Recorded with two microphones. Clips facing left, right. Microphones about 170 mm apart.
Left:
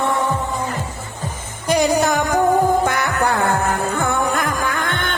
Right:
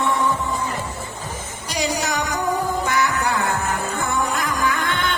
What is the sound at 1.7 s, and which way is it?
Music, 55° left (ahead or behind).